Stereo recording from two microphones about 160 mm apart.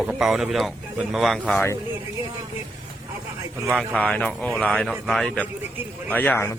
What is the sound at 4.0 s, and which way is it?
A man's voice, 10° left (ahead or behind).